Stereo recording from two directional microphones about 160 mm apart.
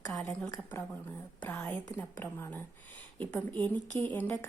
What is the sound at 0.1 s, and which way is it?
Speech, 5° left (ahead or behind).